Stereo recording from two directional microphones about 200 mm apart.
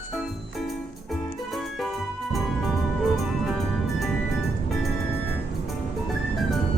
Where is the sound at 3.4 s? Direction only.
Centre (ahead or behind).